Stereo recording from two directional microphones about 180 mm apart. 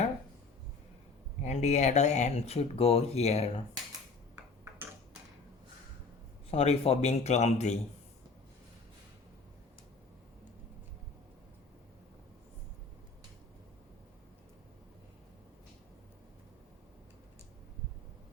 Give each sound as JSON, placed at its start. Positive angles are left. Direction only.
{"t": 1.4, "sound": "speech", "side_deg": 40}
{"t": 6.5, "sound": "speech", "side_deg": 35}